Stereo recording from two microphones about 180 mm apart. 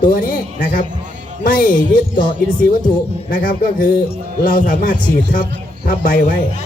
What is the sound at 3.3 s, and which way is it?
A man's voice, 50° left (ahead or behind).